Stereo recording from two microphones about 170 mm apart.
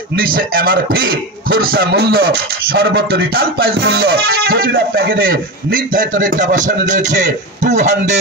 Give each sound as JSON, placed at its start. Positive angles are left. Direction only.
{"t": 0.1, "sound": "a man's voice", "side_deg": -55}